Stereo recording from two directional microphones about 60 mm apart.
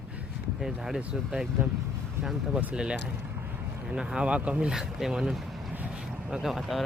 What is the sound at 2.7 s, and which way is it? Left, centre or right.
Speech, centre.